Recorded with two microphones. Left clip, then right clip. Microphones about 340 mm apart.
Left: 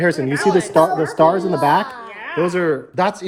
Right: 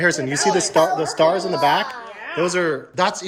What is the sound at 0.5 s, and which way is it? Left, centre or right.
Speech, left.